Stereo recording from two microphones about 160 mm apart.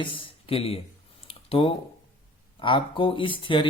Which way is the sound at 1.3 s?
35° left (ahead or behind).